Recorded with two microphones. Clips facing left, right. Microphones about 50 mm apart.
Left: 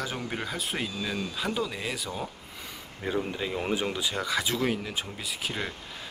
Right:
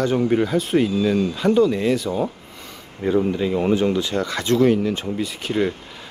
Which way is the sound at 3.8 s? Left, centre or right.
Centre.